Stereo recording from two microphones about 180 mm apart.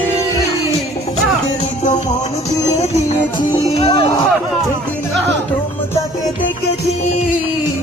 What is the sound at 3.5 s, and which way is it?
Music, 30° left (ahead or behind).